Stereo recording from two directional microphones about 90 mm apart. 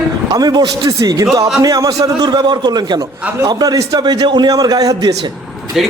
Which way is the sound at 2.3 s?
55° right (ahead or behind).